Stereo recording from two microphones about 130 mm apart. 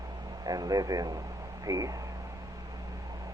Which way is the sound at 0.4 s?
30° right (ahead or behind).